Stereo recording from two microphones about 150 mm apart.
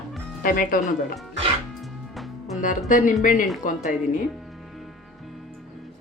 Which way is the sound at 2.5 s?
60° left (ahead or behind).